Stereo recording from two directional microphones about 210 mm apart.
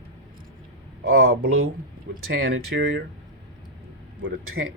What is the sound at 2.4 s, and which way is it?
Speech, 65° right (ahead or behind).